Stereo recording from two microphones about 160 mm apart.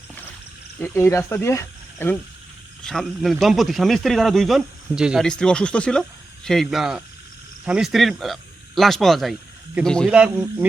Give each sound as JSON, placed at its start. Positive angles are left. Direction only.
{"t": 0.8, "sound": "speech", "side_deg": 15}
{"t": 2.8, "sound": "a man's voice", "side_deg": 0}
{"t": 10.1, "sound": "speech", "side_deg": -10}